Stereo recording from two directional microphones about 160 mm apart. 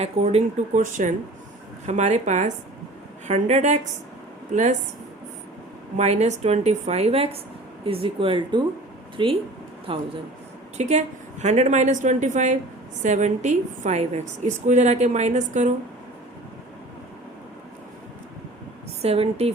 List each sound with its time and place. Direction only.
0.0 s a woman's voice: 40° right (ahead or behind)
6.0 s a woman's voice: 45° right (ahead or behind)
10.8 s a woman's voice: 45° right (ahead or behind)
19.0 s speech: 40° right (ahead or behind)